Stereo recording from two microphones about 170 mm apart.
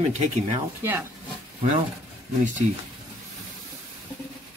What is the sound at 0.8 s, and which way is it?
Speech, 10° right (ahead or behind).